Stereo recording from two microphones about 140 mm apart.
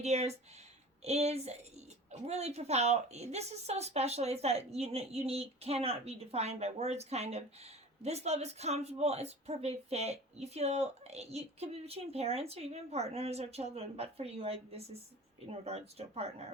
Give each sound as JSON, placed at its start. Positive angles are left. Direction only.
{"t": 0.0, "sound": "speech", "side_deg": -50}